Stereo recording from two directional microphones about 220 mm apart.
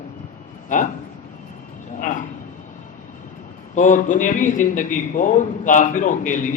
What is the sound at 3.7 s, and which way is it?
A man's voice, 35° left (ahead or behind).